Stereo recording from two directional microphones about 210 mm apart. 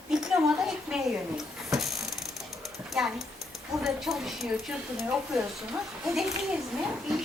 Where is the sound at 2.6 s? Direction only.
Centre (ahead or behind).